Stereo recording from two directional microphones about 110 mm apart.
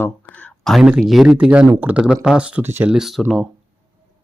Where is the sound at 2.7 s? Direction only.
20° right (ahead or behind).